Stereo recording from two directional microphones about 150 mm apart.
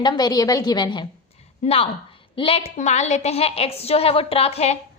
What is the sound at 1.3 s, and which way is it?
A woman's voice, 45° left (ahead or behind).